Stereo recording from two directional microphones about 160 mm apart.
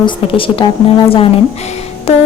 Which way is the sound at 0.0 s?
35° left (ahead or behind).